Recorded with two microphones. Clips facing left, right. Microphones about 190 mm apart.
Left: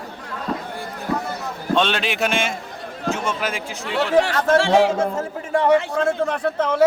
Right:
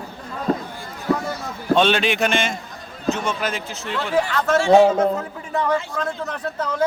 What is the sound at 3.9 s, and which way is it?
Speech, 85° left.